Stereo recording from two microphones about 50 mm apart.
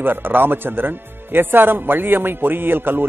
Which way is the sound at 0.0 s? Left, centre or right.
Right.